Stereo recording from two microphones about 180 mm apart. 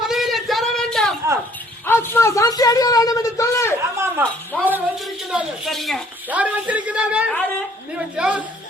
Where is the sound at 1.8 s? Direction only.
10° left (ahead or behind).